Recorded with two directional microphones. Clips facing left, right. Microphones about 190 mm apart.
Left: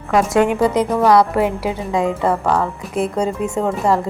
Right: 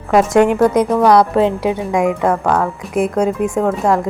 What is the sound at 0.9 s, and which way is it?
Speech, 5° left (ahead or behind).